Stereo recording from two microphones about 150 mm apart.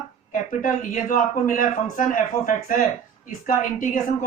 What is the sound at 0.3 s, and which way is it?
Speech, 60° left (ahead or behind).